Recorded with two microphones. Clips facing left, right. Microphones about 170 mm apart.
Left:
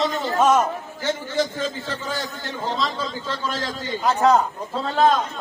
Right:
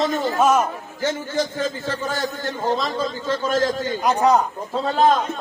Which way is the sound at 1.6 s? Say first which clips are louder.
Right 3 dB; 45° right (ahead or behind).